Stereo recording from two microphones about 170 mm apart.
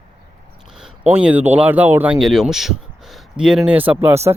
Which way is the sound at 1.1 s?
10° right (ahead or behind).